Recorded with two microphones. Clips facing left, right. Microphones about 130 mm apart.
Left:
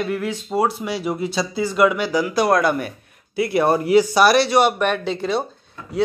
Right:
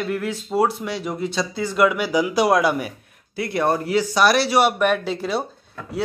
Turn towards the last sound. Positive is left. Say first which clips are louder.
# left 1 dB
turn(degrees=-5)  # may be behind; listen again after turning